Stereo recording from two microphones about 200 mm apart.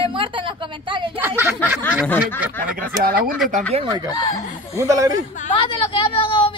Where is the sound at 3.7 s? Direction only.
20° right (ahead or behind).